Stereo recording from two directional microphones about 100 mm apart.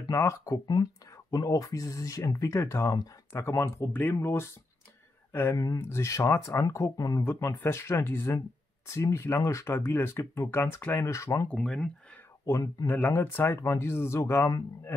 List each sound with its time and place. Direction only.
0.0 s speech: 35° left (ahead or behind); by 11.1 s 15° left (ahead or behind)
11.1 s speech: 30° left (ahead or behind)
11.4 s speech: 10° left (ahead or behind)
12.4 s speech: 30° left (ahead or behind)